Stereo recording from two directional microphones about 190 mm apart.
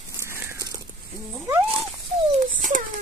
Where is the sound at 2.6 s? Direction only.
45° right (ahead or behind).